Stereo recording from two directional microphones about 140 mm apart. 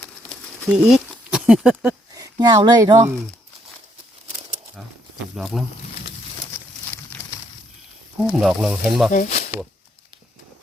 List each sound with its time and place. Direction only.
0.7 s speech: 5° right (ahead or behind)
2.1 s speech: 25° right (ahead or behind)
5.4 s speech: centre (ahead or behind)
6.5 s a sound: 20° left (ahead or behind)
8.3 s speech: centre (ahead or behind)
9.1 s speech: 70° left (ahead or behind)